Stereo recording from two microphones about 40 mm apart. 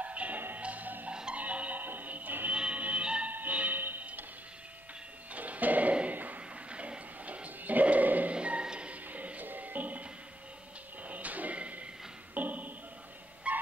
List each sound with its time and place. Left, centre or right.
0.0 s music: right
1.8 s music: right
2.5 s music: right
3.3 s music: right
4.0 s tick-tock: right
5.3 s music: right
6.7 s bow-wow: right
8.4 s music: right
9.1 s music: right
11.1 s a sound: right
12.4 s a sound: right
13.5 s a sound: right